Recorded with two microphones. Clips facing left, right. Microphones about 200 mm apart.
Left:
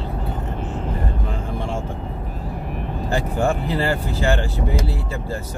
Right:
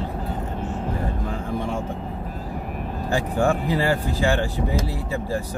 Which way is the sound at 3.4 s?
15° right (ahead or behind).